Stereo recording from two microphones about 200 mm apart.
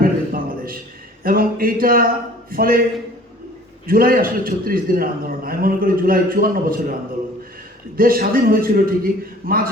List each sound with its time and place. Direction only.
0.0 s a sound: 45° right (ahead or behind)
1.2 s a man's voice: 45° right (ahead or behind)
3.8 s a man's voice: 45° right (ahead or behind)
7.9 s a man's voice: 45° right (ahead or behind)